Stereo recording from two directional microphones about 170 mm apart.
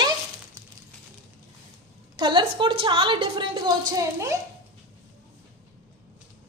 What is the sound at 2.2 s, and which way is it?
A woman's voice, 30° right (ahead or behind).